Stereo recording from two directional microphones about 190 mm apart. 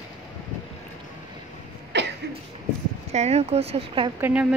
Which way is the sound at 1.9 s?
65° right (ahead or behind).